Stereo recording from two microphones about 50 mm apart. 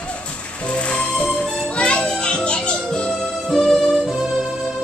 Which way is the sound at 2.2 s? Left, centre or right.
Centre.